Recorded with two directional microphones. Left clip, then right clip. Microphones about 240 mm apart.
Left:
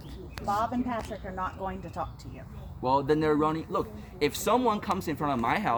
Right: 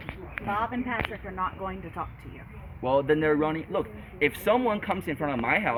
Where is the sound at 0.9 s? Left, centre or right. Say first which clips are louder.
Right 3 dB; left.